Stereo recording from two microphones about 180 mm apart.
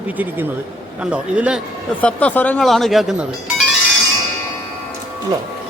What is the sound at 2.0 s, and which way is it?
A man's voice, 10° left (ahead or behind).